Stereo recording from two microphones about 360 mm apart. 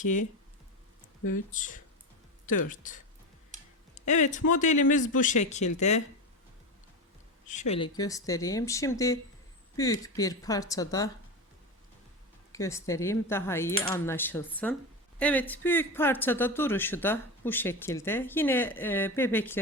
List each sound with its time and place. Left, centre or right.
0.0 s speech: left
1.5 s speech: left
7.7 s speech: centre
12.5 s speech: centre